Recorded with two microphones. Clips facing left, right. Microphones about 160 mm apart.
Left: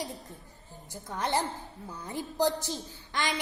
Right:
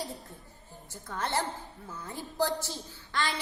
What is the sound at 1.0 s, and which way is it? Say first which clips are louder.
A woman's voice: left 2 dB; 15° left (ahead or behind).